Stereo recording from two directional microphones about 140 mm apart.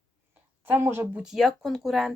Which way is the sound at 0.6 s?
15° right (ahead or behind).